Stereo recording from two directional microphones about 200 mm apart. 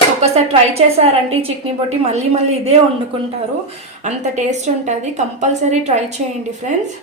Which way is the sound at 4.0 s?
35° right (ahead or behind).